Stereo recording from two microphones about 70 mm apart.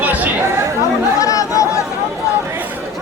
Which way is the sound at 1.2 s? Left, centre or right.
Left.